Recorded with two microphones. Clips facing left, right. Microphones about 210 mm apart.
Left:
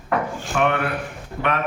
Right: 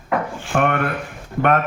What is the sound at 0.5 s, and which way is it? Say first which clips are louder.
Speech: right 2 dB; 50° right (ahead or behind).